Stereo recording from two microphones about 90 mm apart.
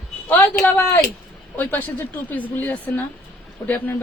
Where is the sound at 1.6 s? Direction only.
20° left (ahead or behind).